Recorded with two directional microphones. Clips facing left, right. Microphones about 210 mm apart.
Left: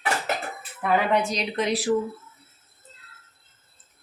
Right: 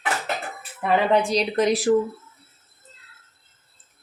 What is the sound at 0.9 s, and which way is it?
Speech, 30° right (ahead or behind).